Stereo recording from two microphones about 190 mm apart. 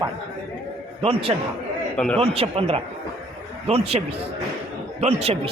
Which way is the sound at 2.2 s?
30° right (ahead or behind).